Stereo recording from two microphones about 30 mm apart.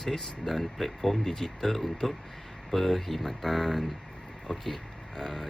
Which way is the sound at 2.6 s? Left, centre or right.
Centre.